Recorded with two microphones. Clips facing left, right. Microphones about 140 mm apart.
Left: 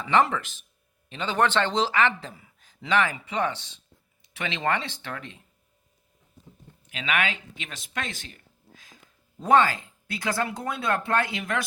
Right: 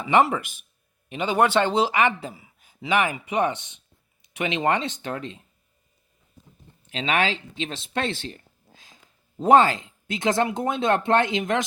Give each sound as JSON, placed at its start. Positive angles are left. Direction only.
{"t": 0.0, "sound": "speech", "side_deg": -10}
{"t": 6.8, "sound": "speech", "side_deg": -30}